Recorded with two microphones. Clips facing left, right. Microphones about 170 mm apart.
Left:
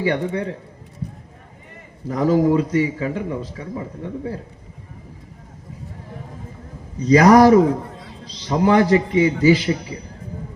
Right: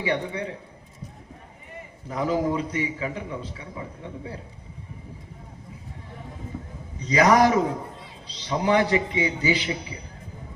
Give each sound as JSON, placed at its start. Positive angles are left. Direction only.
{"t": 0.0, "sound": "a man's voice", "side_deg": 40}
{"t": 2.0, "sound": "a man's voice", "side_deg": 40}
{"t": 7.0, "sound": "a man's voice", "side_deg": 40}